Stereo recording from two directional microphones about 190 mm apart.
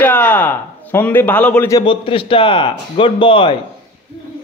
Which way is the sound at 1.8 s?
25° left (ahead or behind).